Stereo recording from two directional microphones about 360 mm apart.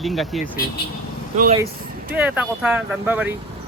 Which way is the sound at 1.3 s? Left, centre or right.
Centre.